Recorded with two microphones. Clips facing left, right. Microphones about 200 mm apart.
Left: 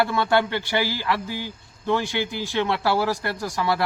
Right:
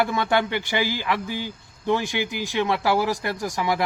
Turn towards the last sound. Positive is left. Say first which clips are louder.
# even
turn(degrees=-15)  # may be behind; listen again after turning